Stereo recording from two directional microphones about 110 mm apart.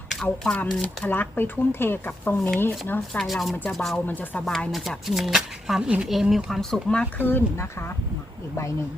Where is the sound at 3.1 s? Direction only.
Centre (ahead or behind); by 7.9 s 25° left (ahead or behind).